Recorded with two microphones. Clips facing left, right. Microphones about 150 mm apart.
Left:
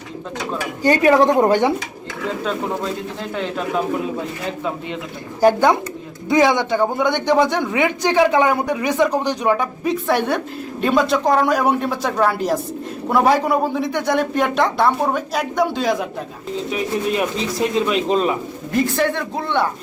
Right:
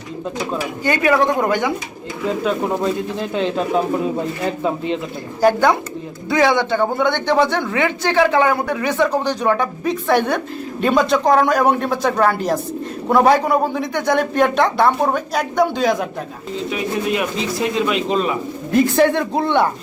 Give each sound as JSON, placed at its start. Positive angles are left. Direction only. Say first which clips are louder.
{"t": 0.8, "sound": "speech", "louder": "left 3 dB", "side_deg": 35}
{"t": 2.4, "sound": "speech", "louder": "right 4 dB", "side_deg": -10}
{"t": 5.4, "sound": "speech", "louder": "even", "side_deg": 20}
{"t": 17.7, "sound": "speech", "louder": "left 1 dB", "side_deg": 35}
{"t": 18.9, "sound": "speech", "louder": "right 5 dB", "side_deg": -15}